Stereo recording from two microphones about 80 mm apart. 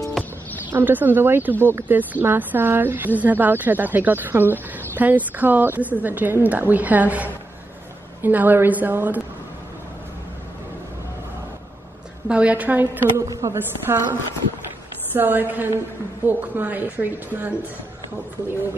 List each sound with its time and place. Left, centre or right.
0.2 s a sound: centre
0.7 s speech: right
12.3 s speech: centre
13.2 s a woman's voice: right
15.1 s speech: right